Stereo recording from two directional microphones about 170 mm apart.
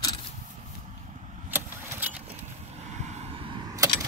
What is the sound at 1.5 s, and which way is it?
Vehicle, 10° right (ahead or behind).